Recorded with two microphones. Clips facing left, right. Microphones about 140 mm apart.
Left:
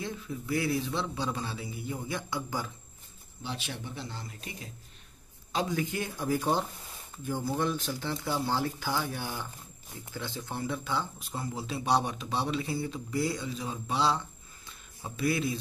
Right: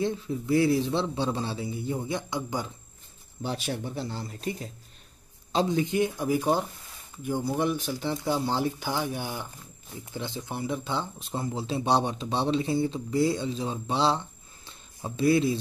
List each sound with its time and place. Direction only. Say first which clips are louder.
0.0 s speech: right 8 dB; 30° right (ahead or behind)
3.4 s speech: right 7 dB; 40° right (ahead or behind)
14.7 s a sound: right 5 dB; 25° right (ahead or behind)